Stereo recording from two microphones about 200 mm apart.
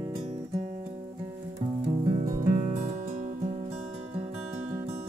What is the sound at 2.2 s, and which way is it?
Music, 45° right (ahead or behind).